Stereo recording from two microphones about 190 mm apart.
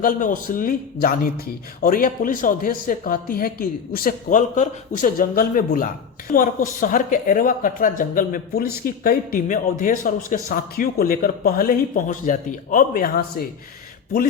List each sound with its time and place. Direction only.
0.0 s speech: 45° left (ahead or behind)